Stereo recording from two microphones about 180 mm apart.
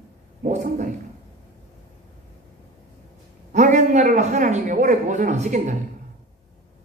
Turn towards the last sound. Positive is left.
turn(degrees=-45)  # may be behind; listen again after turning